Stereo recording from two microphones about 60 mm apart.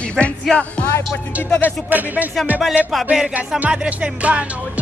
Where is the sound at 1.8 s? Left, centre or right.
Right.